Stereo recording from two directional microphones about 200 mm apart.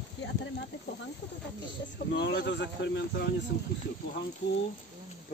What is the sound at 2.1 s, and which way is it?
Speech, 55° left (ahead or behind).